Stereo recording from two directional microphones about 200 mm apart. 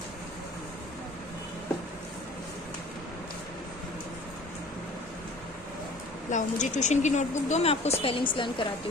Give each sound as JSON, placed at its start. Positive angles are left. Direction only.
{"t": 6.3, "sound": "a woman's voice", "side_deg": 35}